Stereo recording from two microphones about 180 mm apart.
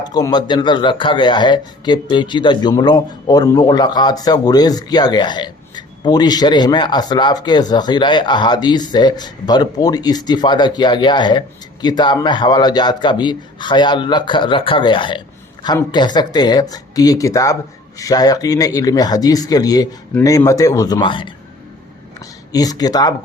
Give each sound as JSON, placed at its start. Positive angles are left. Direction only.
{"t": 0.0, "sound": "speech", "side_deg": 20}
{"t": 22.5, "sound": "speech", "side_deg": 20}